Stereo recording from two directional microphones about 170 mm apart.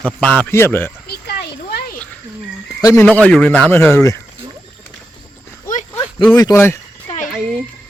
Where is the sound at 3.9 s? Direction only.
20° left (ahead or behind).